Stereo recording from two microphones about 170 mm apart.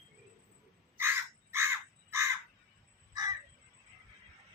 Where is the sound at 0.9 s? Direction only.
15° right (ahead or behind).